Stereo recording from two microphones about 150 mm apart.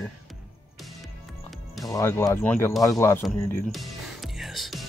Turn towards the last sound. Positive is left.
turn(degrees=0)  # may be behind; listen again after turning